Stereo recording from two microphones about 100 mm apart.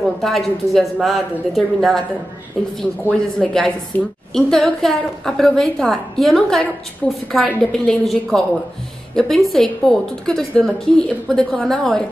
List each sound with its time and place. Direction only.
0.0 s a woman's voice: centre (ahead or behind)
3.1 s speech: 10° left (ahead or behind)
3.9 s a woman's voice: 20° left (ahead or behind)
4.3 s a woman's voice: 5° left (ahead or behind)